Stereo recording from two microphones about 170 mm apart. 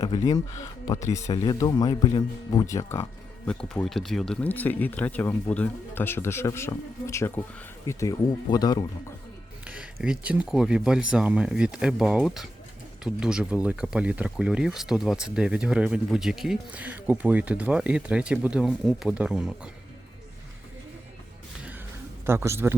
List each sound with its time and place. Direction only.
0.0 s speech: 20° left (ahead or behind)
9.6 s speech: 5° right (ahead or behind)
22.3 s speech: 15° right (ahead or behind)